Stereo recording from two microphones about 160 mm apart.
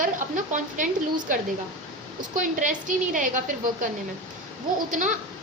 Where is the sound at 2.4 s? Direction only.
55° right (ahead or behind).